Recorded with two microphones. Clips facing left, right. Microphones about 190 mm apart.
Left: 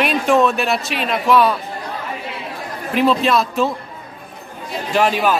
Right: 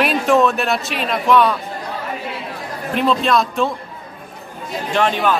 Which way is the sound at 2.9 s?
5° left (ahead or behind).